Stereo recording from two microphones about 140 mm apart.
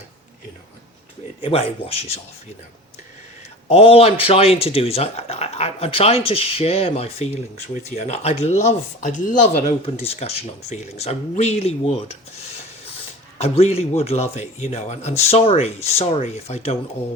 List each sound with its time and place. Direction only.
1.4 s speech: 40° left (ahead or behind)
3.7 s speech: 45° left (ahead or behind); by 9.5 s 65° left (ahead or behind)
10.0 s speech: 45° left (ahead or behind)
13.4 s speech: 50° left (ahead or behind)